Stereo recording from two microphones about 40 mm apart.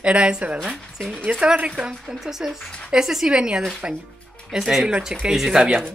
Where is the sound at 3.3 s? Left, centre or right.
Right.